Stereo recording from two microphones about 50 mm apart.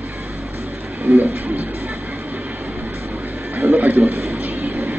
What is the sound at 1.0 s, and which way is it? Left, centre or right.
Speech, right.